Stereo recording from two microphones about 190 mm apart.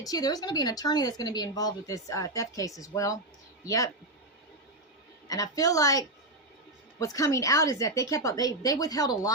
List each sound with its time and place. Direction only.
0.0 s speech: 20° left (ahead or behind)
5.3 s a woman's voice: 20° left (ahead or behind)